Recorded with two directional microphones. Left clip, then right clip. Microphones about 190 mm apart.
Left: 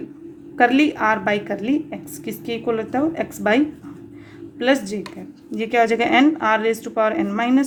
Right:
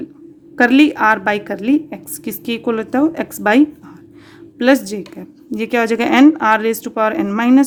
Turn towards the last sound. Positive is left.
turn(degrees=-35)  # may be behind; listen again after turning